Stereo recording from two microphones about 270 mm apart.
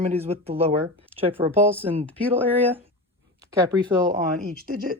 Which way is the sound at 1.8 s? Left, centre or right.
Right.